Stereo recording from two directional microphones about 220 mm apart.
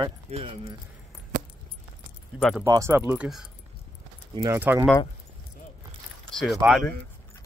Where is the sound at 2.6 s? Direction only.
15° right (ahead or behind).